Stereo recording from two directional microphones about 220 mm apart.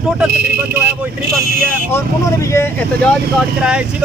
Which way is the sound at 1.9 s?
10° left (ahead or behind).